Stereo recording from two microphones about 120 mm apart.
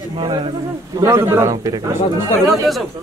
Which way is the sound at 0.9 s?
25° right (ahead or behind).